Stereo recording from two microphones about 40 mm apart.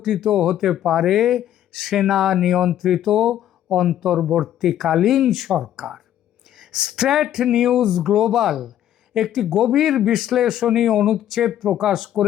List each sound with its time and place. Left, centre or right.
0.0 s speech: centre